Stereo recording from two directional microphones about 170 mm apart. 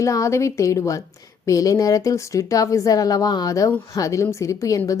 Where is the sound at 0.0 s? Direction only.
20° left (ahead or behind).